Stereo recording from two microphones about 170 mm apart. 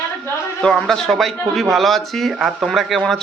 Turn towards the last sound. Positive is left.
turn(degrees=0)  # may be behind; listen again after turning